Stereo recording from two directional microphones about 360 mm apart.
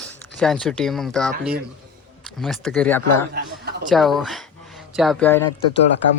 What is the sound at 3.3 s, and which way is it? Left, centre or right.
Speech, right.